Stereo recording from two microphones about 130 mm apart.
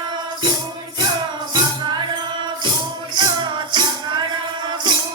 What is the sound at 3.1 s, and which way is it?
Music, 35° right (ahead or behind).